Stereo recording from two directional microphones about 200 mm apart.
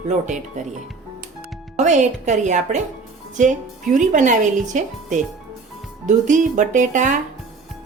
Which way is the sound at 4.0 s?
40° right (ahead or behind).